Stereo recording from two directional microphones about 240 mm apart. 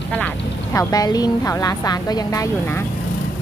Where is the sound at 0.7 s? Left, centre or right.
Centre.